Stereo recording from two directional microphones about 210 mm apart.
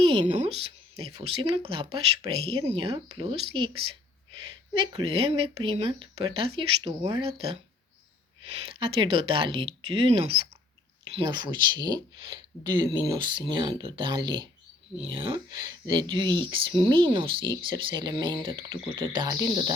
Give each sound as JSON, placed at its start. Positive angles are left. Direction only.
{"t": 0.0, "sound": "a woman's voice", "side_deg": -25}
{"t": 8.6, "sound": "speech", "side_deg": -25}